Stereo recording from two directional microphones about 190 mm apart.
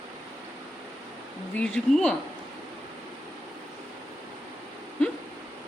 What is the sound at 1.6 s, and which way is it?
Speech, 5° left (ahead or behind).